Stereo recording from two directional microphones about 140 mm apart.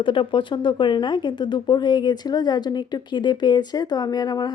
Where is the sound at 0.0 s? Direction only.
35° left (ahead or behind).